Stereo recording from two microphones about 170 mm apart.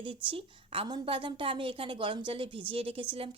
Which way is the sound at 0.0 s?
30° right (ahead or behind).